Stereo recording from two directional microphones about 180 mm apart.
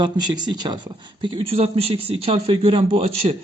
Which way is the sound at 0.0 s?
25° right (ahead or behind).